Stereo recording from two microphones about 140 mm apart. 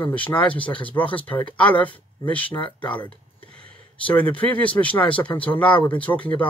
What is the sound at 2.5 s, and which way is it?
Speech, 35° left (ahead or behind).